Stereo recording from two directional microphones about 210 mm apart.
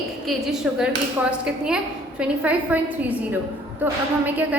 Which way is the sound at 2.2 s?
5° right (ahead or behind).